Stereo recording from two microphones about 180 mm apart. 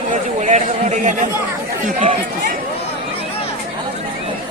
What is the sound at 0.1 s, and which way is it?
Speech, 45° right (ahead or behind).